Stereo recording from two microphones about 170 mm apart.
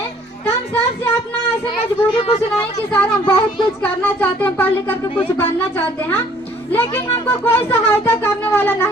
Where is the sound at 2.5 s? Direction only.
10° left (ahead or behind).